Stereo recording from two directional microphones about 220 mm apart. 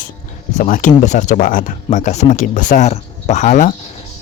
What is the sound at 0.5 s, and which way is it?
Speech, 35° left (ahead or behind).